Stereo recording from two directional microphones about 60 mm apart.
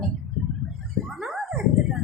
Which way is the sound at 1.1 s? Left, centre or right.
Centre.